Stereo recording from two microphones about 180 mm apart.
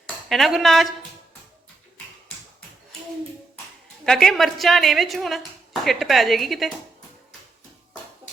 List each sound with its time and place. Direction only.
0.3 s speech: centre (ahead or behind)
4.0 s speech: 5° left (ahead or behind)